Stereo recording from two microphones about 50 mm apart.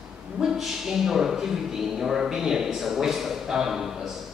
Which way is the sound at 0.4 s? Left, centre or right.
Centre.